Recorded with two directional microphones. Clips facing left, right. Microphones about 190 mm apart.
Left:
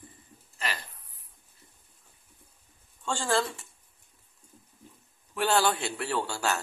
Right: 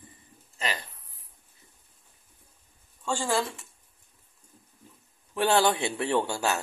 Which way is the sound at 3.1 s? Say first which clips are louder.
Even; 5° right (ahead or behind).